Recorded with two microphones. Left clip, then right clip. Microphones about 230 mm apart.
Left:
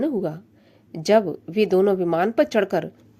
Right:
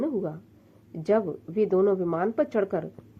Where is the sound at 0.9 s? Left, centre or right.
Left.